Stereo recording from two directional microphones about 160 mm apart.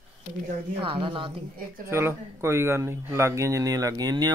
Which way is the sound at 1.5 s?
60° right (ahead or behind).